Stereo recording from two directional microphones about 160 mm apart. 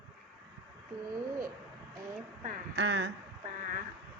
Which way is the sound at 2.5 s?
90° right.